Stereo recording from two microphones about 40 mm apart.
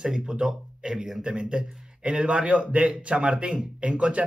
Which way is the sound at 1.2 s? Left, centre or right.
Right.